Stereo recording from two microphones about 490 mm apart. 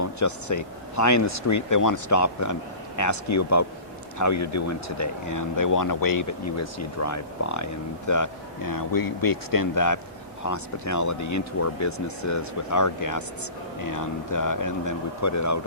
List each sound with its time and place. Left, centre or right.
0.0 s speech: left